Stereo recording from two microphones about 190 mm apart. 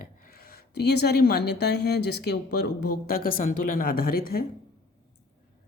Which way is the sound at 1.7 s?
60° left (ahead or behind).